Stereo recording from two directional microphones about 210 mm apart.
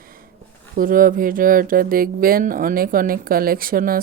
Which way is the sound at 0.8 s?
40° right (ahead or behind).